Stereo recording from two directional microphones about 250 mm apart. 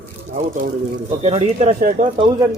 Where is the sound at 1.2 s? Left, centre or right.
Right.